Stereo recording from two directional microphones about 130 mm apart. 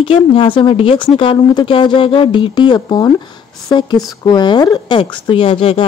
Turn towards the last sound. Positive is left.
turn(degrees=40)  # may be behind; listen again after turning